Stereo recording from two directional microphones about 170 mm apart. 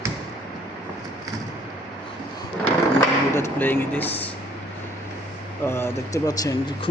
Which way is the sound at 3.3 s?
15° left (ahead or behind).